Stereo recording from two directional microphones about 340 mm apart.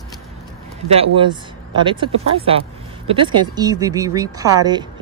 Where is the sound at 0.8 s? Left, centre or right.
Centre.